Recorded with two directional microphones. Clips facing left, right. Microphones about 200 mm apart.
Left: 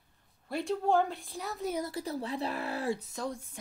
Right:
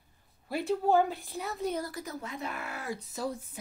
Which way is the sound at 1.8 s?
30° left (ahead or behind).